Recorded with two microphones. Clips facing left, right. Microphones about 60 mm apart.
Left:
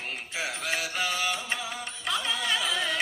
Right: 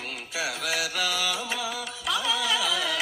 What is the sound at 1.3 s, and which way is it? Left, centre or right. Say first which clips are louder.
Music: right 2 dB; right.